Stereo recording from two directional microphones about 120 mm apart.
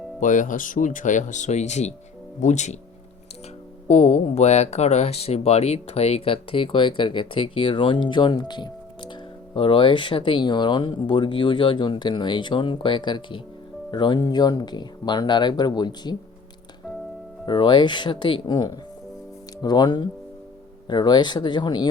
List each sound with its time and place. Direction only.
0.2 s speech: 90° left
3.8 s speech: 70° left (ahead or behind); by 16.1 s 35° left (ahead or behind)
17.4 s speech: 35° left (ahead or behind)